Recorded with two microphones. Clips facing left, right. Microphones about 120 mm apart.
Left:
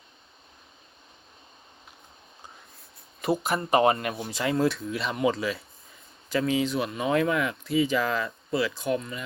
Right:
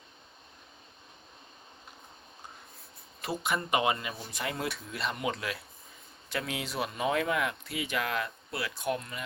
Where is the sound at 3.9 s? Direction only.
55° left (ahead or behind); by 4.7 s 90° left.